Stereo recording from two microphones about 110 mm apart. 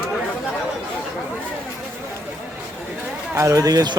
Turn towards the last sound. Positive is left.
turn(degrees=-35)  # may be behind; listen again after turning